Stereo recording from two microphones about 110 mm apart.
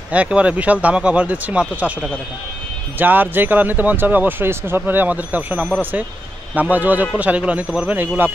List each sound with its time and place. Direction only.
0.1 s speech: 10° right (ahead or behind)